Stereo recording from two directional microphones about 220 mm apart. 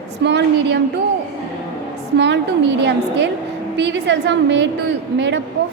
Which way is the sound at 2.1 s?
50° right (ahead or behind).